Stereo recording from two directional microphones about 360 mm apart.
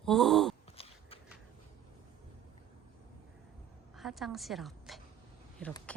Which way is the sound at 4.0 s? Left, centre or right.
Centre.